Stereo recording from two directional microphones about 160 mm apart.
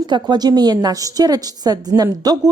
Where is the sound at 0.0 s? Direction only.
25° right (ahead or behind).